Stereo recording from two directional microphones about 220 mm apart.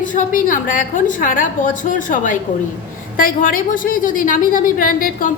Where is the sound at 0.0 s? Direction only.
35° left (ahead or behind).